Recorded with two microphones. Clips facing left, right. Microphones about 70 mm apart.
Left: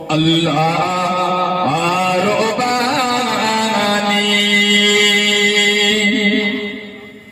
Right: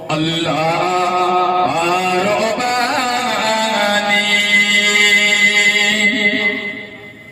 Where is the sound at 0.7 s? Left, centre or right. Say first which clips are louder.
Right 1 dB; right.